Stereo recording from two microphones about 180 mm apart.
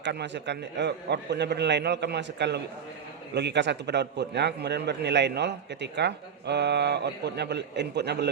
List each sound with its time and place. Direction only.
0.0 s a man's voice: 70° right (ahead or behind)